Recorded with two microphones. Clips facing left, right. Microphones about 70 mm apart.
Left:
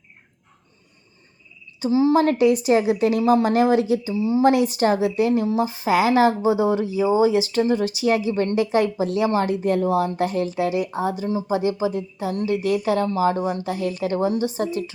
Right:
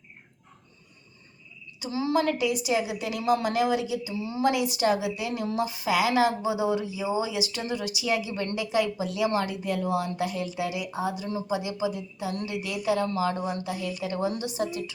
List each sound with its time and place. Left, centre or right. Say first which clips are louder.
1.8 s speech: left 8 dB; left
4.1 s a woman's voice: left 10 dB; left
4.4 s speech: left 5 dB; left